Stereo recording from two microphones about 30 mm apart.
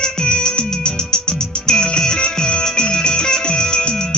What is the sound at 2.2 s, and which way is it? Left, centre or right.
Music, left.